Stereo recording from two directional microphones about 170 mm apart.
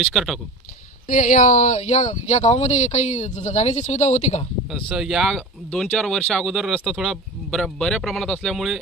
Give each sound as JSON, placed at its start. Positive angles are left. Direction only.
{"t": 0.0, "sound": "speech", "side_deg": 0}
{"t": 1.0, "sound": "speech", "side_deg": 50}
{"t": 4.7, "sound": "speech", "side_deg": 0}